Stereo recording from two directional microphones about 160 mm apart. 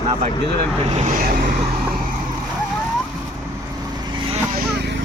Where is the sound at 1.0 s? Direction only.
55° right (ahead or behind).